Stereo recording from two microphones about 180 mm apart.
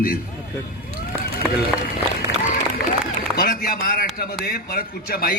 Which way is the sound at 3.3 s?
55° left (ahead or behind).